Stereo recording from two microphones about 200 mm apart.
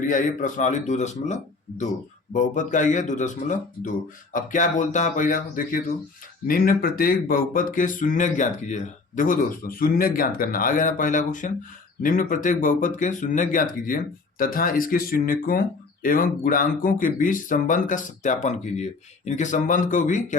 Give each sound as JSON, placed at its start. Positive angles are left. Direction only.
{"t": 0.0, "sound": "speech", "side_deg": 40}